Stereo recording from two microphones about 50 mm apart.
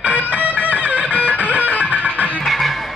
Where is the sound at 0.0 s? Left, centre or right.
Right.